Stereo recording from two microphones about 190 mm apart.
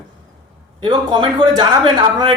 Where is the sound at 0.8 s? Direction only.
25° right (ahead or behind).